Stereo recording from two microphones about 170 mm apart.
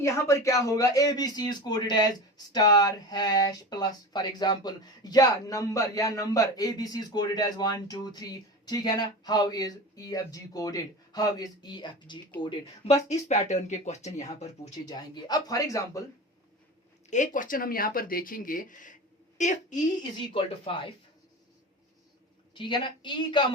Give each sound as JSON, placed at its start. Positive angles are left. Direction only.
{"t": 0.0, "sound": "speech", "side_deg": 15}
{"t": 14.8, "sound": "speech", "side_deg": 25}
{"t": 17.1, "sound": "a woman's voice", "side_deg": 50}
{"t": 20.7, "sound": "speech", "side_deg": 30}
{"t": 22.5, "sound": "speech", "side_deg": 30}